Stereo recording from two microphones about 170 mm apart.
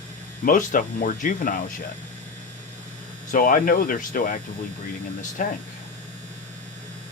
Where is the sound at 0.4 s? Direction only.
50° left (ahead or behind).